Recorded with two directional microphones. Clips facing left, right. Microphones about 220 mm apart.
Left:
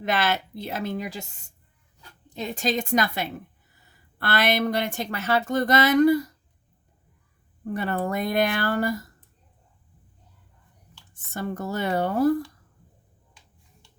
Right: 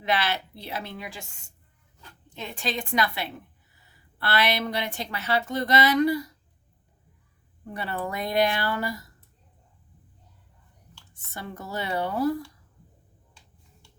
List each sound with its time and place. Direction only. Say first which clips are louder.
0.0 s a woman's voice: left 2 dB; 45° left (ahead or behind)
2.4 s a woman's voice: left 5 dB; 40° left (ahead or behind)
7.6 s a woman's voice: left 5 dB; 50° left (ahead or behind)
11.1 s a woman's voice: left 8 dB; 50° left (ahead or behind)